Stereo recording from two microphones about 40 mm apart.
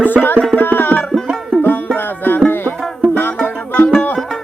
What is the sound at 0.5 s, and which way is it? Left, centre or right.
Music, left.